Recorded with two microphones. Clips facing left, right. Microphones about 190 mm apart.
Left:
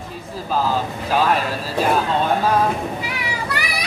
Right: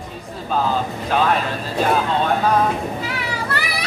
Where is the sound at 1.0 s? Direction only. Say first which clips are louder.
Even; 5° left (ahead or behind).